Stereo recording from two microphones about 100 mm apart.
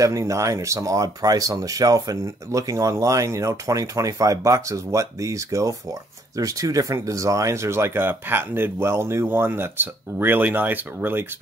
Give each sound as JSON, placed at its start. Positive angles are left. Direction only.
{"t": 0.0, "sound": "speech", "side_deg": -30}